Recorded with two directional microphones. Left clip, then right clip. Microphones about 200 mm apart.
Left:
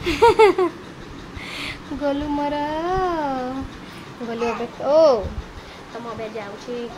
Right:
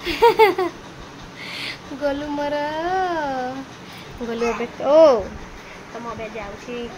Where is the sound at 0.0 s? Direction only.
20° left (ahead or behind).